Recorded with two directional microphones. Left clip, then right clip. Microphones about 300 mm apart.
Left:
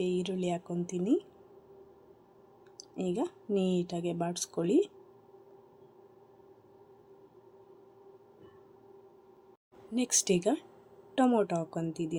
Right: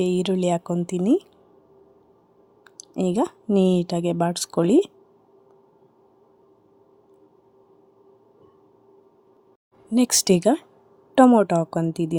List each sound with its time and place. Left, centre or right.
0.0 s speech: right
2.6 s speech: right
9.9 s speech: right